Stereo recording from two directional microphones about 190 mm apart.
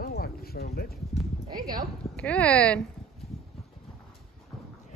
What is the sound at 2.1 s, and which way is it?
Speech, 5° left (ahead or behind).